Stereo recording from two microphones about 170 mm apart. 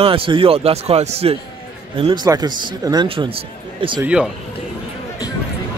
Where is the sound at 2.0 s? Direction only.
25° right (ahead or behind).